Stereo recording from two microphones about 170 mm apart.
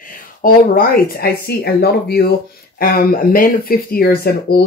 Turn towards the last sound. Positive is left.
turn(degrees=65)  # may be behind; listen again after turning